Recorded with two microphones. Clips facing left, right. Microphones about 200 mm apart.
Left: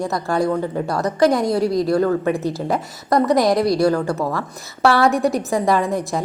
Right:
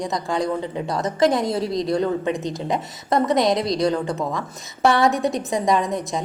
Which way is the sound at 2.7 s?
20° right (ahead or behind).